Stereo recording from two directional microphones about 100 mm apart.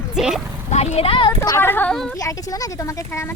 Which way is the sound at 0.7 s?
90° left.